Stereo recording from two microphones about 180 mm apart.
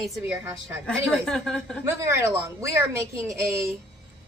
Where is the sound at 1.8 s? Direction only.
15° right (ahead or behind).